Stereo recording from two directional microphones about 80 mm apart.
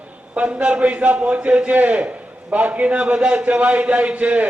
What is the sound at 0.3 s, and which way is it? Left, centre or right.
A man's voice, centre.